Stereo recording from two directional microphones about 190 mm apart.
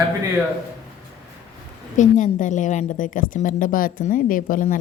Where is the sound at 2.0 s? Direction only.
40° left (ahead or behind).